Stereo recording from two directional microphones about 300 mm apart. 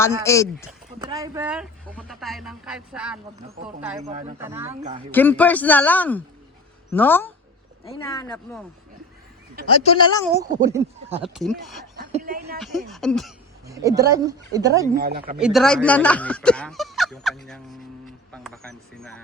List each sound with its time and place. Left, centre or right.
0.3 s speech: centre
0.9 s speech: centre
4.0 s speech: right
4.4 s speech: centre
4.8 s speech: right
5.1 s speech: centre
9.8 s speech: centre
10.4 s speech: centre
11.2 s speech: centre
11.9 s a sound: right
12.5 s speech: centre
13.7 s speech: centre
14.9 s speech: right
15.4 s speech: centre